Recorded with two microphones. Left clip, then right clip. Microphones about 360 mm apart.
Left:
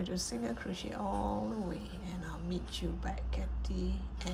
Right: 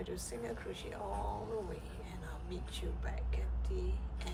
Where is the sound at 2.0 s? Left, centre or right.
Centre.